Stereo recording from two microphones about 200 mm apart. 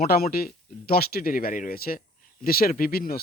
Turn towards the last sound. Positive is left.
turn(degrees=45)  # may be behind; listen again after turning